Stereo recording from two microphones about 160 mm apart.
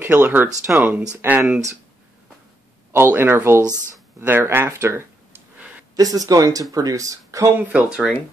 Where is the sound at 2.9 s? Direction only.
15° right (ahead or behind).